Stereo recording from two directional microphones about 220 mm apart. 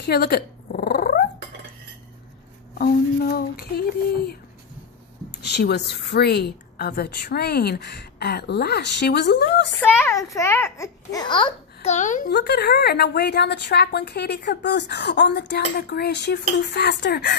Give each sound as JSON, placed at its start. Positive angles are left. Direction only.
{"t": 0.0, "sound": "dog", "side_deg": 45}
{"t": 2.8, "sound": "a woman's voice", "side_deg": 45}
{"t": 5.4, "sound": "a woman's voice", "side_deg": 50}
{"t": 9.8, "sound": "a child's voice", "side_deg": 10}
{"t": 12.4, "sound": "a woman's voice", "side_deg": 45}